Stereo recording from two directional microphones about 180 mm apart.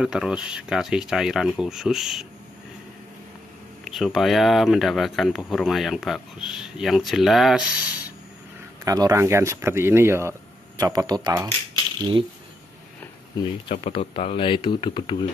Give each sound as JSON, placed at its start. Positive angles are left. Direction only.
{"t": 0.0, "sound": "speech", "side_deg": -5}
{"t": 3.8, "sound": "speech", "side_deg": 0}
{"t": 8.8, "sound": "speech", "side_deg": -20}
{"t": 13.7, "sound": "speech", "side_deg": 30}